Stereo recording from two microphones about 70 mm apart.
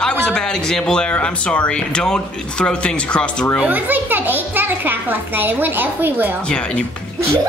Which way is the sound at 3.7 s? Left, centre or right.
Right.